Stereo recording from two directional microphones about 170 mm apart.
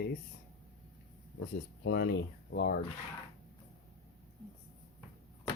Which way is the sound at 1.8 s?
75° left (ahead or behind).